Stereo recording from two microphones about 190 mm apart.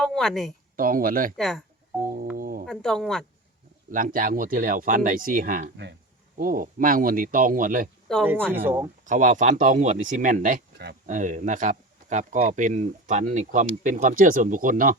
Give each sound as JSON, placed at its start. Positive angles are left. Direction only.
{"t": 0.0, "sound": "a sound", "side_deg": 0}
{"t": 0.8, "sound": "speech", "side_deg": -50}
{"t": 1.4, "sound": "speech", "side_deg": 0}
{"t": 2.3, "sound": "music", "side_deg": -50}
{"t": 2.6, "sound": "speech", "side_deg": 5}
{"t": 3.9, "sound": "speech", "side_deg": -45}
{"t": 5.7, "sound": "speech", "side_deg": -65}
{"t": 6.4, "sound": "speech", "side_deg": -45}
{"t": 8.1, "sound": "speech", "side_deg": 0}
{"t": 8.5, "sound": "speech", "side_deg": -10}
{"t": 9.0, "sound": "speech", "side_deg": -40}